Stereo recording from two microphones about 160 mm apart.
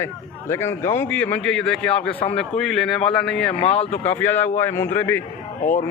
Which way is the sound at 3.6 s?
40° left (ahead or behind).